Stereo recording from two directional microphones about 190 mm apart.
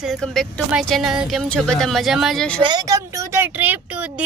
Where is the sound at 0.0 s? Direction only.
Centre (ahead or behind).